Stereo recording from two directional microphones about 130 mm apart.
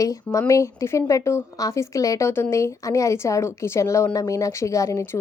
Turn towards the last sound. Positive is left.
turn(degrees=25)  # may be behind; listen again after turning